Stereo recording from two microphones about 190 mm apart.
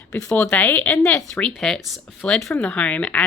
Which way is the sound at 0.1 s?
10° left (ahead or behind).